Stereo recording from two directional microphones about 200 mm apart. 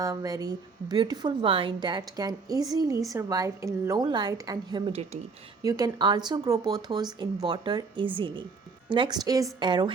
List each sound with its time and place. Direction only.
0.0 s a woman's voice: 15° right (ahead or behind)
4.9 s speech: 30° right (ahead or behind)
5.6 s a woman's voice: 20° right (ahead or behind)